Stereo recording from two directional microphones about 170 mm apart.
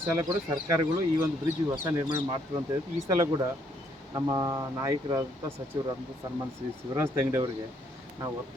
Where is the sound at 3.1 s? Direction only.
20° right (ahead or behind).